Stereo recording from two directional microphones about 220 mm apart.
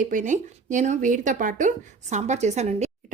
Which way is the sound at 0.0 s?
35° right (ahead or behind).